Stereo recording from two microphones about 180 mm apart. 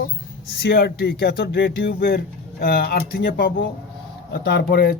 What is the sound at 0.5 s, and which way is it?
Speech, 60° left (ahead or behind).